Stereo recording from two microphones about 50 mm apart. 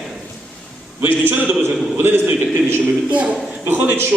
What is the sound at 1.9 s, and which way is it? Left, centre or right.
Speech, right.